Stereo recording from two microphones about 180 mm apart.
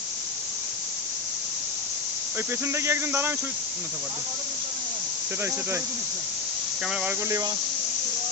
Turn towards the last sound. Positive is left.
turn(degrees=-15)  # may be behind; listen again after turning